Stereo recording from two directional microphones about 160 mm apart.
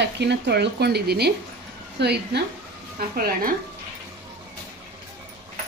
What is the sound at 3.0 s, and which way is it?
Speech, 70° right (ahead or behind).